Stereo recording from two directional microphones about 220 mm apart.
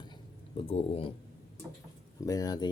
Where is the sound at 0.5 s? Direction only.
25° left (ahead or behind).